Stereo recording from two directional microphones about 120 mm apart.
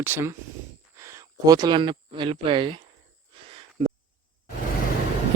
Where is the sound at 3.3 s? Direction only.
50° right (ahead or behind).